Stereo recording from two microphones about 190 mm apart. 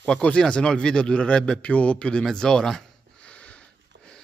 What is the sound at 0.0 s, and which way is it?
A man's voice, 5° left (ahead or behind).